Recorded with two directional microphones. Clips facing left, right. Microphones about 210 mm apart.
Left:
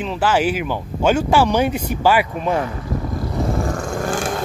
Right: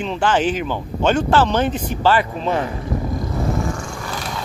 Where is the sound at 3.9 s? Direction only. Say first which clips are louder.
Left 7 dB; 45° left (ahead or behind).